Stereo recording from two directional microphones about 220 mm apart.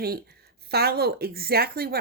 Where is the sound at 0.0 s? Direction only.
45° right (ahead or behind).